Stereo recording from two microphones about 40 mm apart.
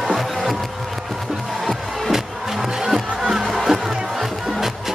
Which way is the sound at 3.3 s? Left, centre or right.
Centre.